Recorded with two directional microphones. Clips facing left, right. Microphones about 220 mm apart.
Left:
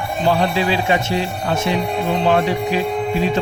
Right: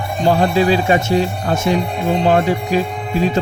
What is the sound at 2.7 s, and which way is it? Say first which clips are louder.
Speech: right 5 dB; 45° right (ahead or behind).